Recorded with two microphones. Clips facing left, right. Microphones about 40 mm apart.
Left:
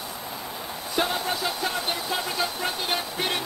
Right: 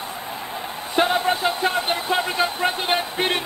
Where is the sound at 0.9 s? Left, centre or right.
Right.